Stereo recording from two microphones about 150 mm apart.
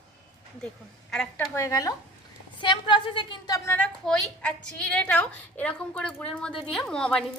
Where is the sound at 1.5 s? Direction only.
20° left (ahead or behind).